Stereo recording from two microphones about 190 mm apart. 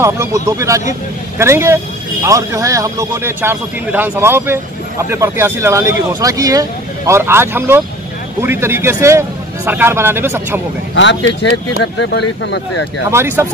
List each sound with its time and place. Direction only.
0.0 s a man's voice: 15° right (ahead or behind)
11.0 s speech: 75° left (ahead or behind)
13.1 s a man's voice: 15° right (ahead or behind)